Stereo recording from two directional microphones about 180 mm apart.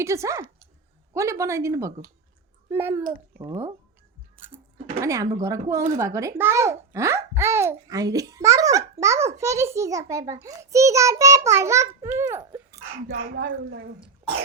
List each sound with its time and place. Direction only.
0.0 s a child's voice: 15° right (ahead or behind)
13.1 s speech: 80° right